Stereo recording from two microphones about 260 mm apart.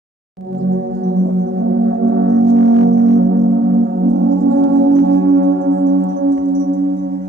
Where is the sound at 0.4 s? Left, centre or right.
Centre.